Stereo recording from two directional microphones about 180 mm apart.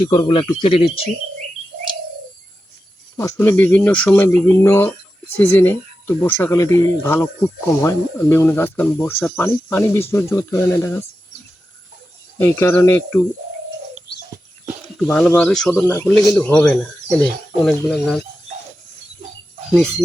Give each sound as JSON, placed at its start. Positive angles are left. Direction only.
{"t": 0.0, "sound": "speech", "side_deg": 25}
{"t": 3.2, "sound": "speech", "side_deg": 15}
{"t": 12.4, "sound": "speech", "side_deg": 15}
{"t": 15.0, "sound": "speech", "side_deg": 10}